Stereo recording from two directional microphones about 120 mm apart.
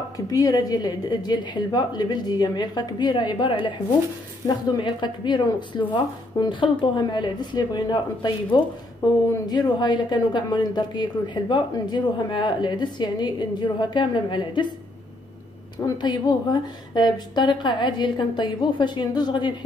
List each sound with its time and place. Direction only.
0.3 s a woman's voice: 30° left (ahead or behind)
4.7 s a woman's voice: 40° left (ahead or behind)
15.8 s a woman's voice: 35° left (ahead or behind)